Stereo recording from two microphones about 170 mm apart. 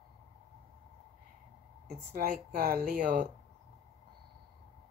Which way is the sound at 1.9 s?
60° right (ahead or behind).